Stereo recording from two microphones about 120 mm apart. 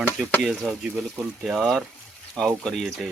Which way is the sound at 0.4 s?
5° right (ahead or behind).